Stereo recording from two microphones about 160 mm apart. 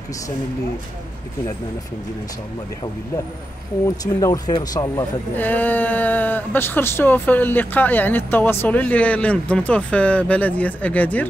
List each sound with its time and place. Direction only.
4.0 s speech: 25° left (ahead or behind)
5.3 s speech: 10° left (ahead or behind)